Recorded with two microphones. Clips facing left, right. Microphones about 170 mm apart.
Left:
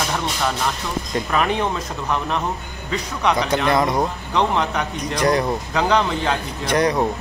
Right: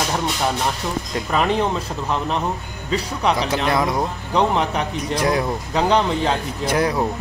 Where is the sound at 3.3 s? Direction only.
Centre (ahead or behind).